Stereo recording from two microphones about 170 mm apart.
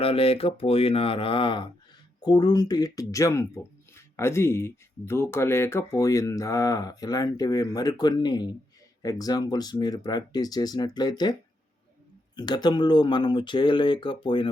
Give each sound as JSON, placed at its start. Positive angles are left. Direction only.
{"t": 0.0, "sound": "speech", "side_deg": 35}
{"t": 12.4, "sound": "speech", "side_deg": 25}